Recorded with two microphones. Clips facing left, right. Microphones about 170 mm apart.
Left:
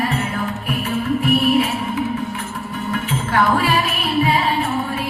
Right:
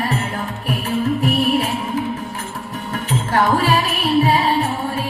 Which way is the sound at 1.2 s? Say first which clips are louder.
Left 1 dB; 40° right (ahead or behind).